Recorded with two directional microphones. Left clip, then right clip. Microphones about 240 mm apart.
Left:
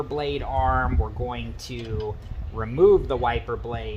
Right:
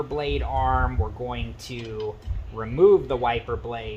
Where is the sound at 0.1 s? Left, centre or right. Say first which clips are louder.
Even; centre.